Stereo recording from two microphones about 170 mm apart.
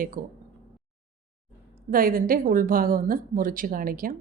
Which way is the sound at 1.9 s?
55° right (ahead or behind).